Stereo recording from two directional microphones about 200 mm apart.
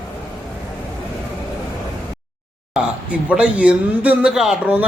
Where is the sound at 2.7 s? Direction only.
5° right (ahead or behind).